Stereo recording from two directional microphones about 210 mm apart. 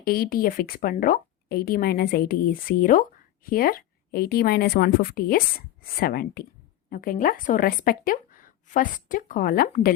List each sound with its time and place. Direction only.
0.0 s a woman's voice: 45° left (ahead or behind)